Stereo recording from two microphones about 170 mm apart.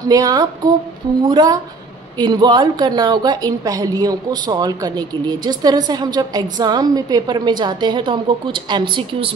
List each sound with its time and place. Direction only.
0.1 s a woman's voice: 20° right (ahead or behind)